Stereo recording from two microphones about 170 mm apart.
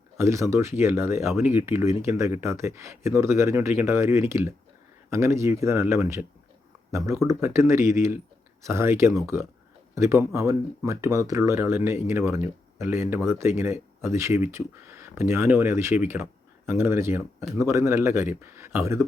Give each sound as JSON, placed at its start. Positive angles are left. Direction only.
{"t": 0.2, "sound": "speech", "side_deg": -15}